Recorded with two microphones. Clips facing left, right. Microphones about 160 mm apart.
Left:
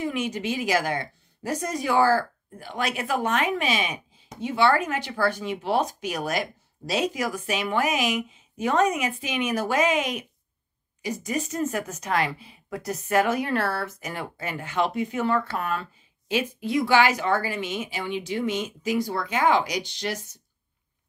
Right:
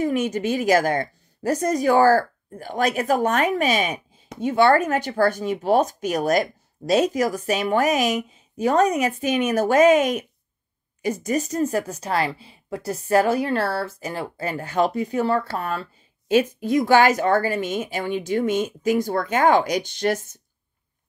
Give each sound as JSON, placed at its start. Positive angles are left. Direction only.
{"t": 0.0, "sound": "a woman's voice", "side_deg": -45}
{"t": 16.3, "sound": "speech", "side_deg": -45}